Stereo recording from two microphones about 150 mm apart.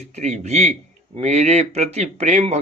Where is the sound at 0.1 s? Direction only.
50° right (ahead or behind).